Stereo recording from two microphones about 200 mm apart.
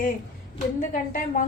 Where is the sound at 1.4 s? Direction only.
40° left (ahead or behind).